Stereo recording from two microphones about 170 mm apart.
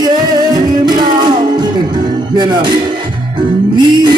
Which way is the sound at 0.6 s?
25° right (ahead or behind).